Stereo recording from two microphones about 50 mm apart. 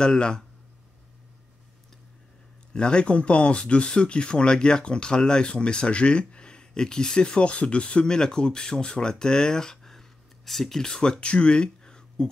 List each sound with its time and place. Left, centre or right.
0.0 s speech: centre
2.7 s speech: centre